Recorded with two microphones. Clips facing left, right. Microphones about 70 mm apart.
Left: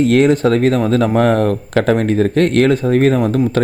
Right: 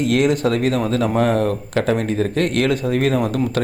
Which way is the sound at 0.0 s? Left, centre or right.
Left.